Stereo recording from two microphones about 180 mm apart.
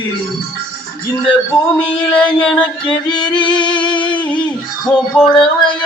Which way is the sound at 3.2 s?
25° left (ahead or behind).